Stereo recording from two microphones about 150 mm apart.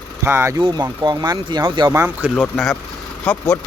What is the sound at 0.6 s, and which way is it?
Speech, 30° right (ahead or behind).